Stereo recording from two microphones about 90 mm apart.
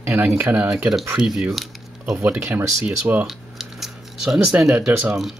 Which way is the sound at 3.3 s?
5° right (ahead or behind).